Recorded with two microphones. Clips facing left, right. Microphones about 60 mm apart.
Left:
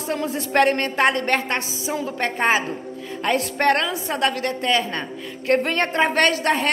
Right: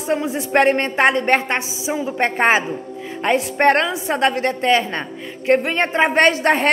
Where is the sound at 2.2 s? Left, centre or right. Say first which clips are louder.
Right 4 dB; right.